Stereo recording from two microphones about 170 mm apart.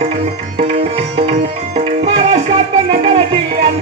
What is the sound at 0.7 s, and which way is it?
Tabla, 40° right (ahead or behind).